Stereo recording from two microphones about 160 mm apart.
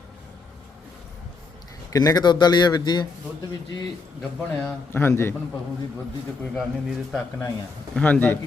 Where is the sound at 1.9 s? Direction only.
20° left (ahead or behind).